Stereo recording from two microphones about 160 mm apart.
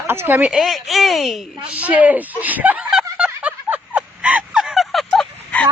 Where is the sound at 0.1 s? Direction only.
15° right (ahead or behind).